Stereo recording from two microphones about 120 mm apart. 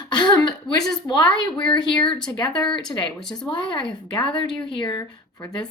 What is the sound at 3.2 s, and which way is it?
Speech, 5° left (ahead or behind).